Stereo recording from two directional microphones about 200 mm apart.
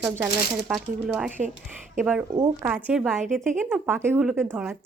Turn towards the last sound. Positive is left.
turn(degrees=-10)  # may be behind; listen again after turning